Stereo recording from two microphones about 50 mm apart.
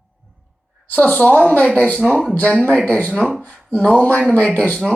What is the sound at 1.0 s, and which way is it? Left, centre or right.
A woman's voice, left.